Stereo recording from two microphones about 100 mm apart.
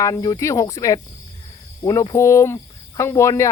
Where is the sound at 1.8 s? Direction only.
30° left (ahead or behind).